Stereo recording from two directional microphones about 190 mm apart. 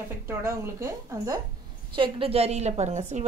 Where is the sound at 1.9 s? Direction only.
30° right (ahead or behind).